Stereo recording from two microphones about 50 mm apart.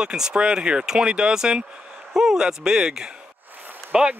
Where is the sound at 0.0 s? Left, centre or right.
Centre.